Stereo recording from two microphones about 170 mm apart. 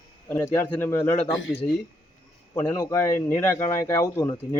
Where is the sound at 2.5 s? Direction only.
15° left (ahead or behind).